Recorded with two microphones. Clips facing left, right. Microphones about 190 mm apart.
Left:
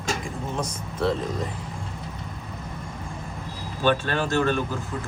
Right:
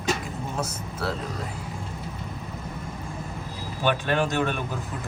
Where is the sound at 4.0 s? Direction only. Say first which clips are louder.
Left 1 dB; 15° right (ahead or behind).